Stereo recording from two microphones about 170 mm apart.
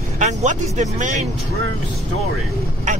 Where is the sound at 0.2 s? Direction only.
45° right (ahead or behind).